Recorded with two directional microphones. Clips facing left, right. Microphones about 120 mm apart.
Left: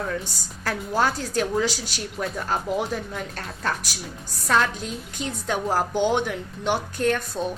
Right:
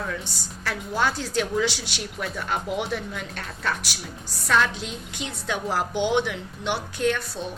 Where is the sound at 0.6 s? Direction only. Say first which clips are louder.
Left 2 dB; 40° left (ahead or behind).